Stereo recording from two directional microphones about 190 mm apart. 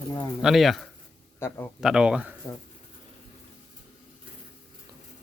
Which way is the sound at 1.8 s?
5° right (ahead or behind).